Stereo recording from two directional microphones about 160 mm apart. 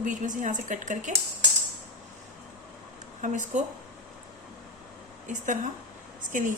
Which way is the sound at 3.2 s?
50° right (ahead or behind).